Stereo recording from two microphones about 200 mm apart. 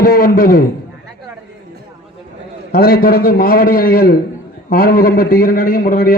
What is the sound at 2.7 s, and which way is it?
A man's voice, 50° left (ahead or behind).